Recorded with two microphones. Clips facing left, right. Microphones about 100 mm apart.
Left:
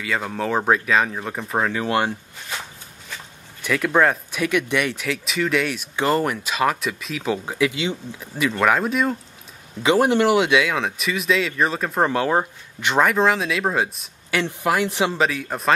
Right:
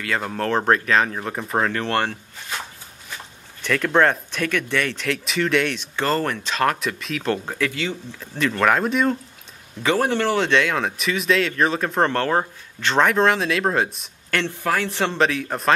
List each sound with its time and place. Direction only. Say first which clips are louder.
0.0 s speech: even; centre (ahead or behind)
3.6 s speech: even; 5° left (ahead or behind)
5.0 s speech: right 1 dB; centre (ahead or behind)
9.8 s speech: left 3 dB; 15° left (ahead or behind)
14.4 s speech: left 3 dB; 15° left (ahead or behind)
15.1 s speech: right 1 dB; centre (ahead or behind)